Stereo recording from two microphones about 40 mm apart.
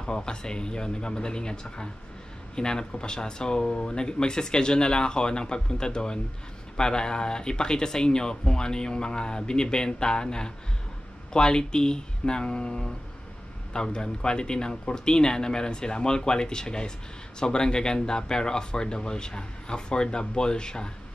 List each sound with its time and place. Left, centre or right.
0.0 s speech: left